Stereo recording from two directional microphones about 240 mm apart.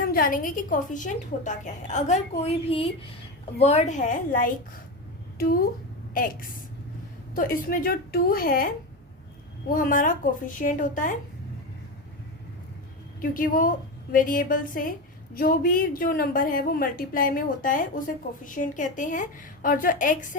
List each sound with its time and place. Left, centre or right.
0.1 s a woman's voice: left
6.1 s a woman's voice: left
13.3 s a woman's voice: left